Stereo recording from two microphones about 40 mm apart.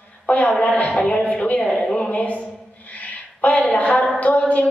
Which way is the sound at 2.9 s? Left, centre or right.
Left.